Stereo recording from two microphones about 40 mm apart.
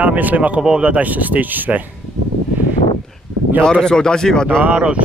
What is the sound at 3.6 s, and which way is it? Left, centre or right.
Speech, centre.